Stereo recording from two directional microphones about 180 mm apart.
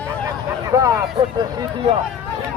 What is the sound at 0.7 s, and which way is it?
Speech, 20° right (ahead or behind).